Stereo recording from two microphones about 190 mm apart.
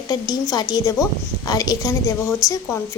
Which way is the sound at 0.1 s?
20° left (ahead or behind).